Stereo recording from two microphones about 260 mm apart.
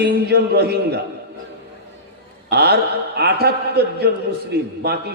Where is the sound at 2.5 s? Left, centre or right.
Right.